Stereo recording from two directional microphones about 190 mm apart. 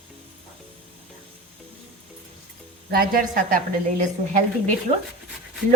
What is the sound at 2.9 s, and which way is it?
A woman's voice, 50° right (ahead or behind).